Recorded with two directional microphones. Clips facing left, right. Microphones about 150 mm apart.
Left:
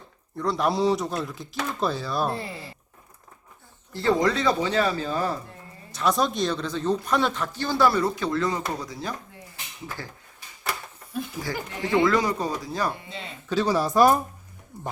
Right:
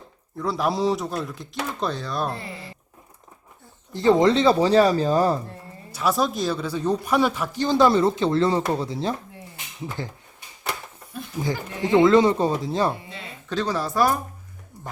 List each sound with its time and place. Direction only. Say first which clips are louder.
0.3 s speech: even; centre (ahead or behind)
3.9 s speech: right 5 dB; 20° right (ahead or behind); by 5.4 s 35° right (ahead or behind)
5.9 s speech: right 1 dB; 5° right (ahead or behind); by 10.1 s 20° right (ahead or behind)
10.7 s a sound: right 1 dB; centre (ahead or behind)
11.3 s speech: right 4 dB; 20° right (ahead or behind)
13.5 s speech: left 2 dB; 10° left (ahead or behind)